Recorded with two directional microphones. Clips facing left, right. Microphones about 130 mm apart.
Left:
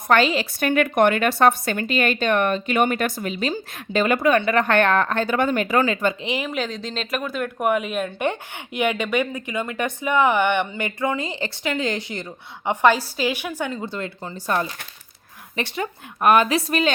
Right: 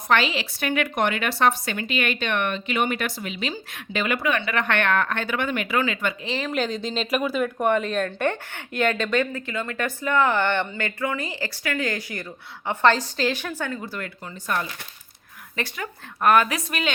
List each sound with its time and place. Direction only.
0.1 s a woman's voice: 45° left (ahead or behind)
6.2 s speech: 15° left (ahead or behind)
6.5 s speech: centre (ahead or behind); by 16.6 s 25° left (ahead or behind)
16.6 s a woman's voice: 40° left (ahead or behind)